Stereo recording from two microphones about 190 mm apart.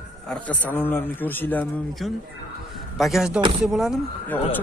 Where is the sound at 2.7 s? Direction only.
Centre (ahead or behind).